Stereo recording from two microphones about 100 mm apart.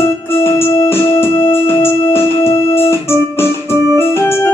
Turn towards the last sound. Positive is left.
turn(degrees=25)  # may be behind; listen again after turning